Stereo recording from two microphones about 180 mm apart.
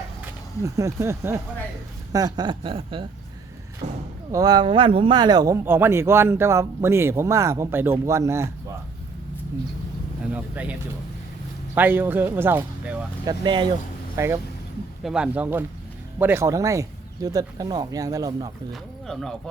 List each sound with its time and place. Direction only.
0.6 s speech: 15° right (ahead or behind)
4.3 s speech: 20° right (ahead or behind)
10.3 s speech: 5° right (ahead or behind)
13.2 s speech: 25° right (ahead or behind)
15.0 s speech: 5° right (ahead or behind); by 18.5 s 20° right (ahead or behind)
18.7 s speech: centre (ahead or behind)